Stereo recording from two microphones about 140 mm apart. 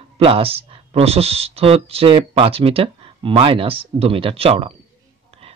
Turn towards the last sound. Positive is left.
turn(degrees=-45)  # may be behind; listen again after turning